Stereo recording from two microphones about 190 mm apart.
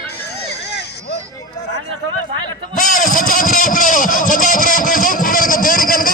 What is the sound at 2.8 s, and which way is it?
Vehicle, 45° left (ahead or behind).